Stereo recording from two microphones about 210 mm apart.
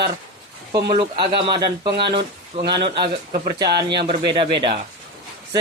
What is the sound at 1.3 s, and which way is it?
Speech, 20° right (ahead or behind).